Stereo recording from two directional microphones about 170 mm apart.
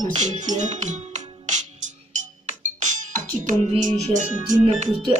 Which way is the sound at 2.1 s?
45° right (ahead or behind).